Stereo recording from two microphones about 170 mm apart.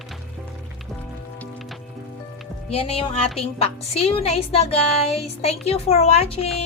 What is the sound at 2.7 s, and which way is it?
A woman's voice, 35° left (ahead or behind).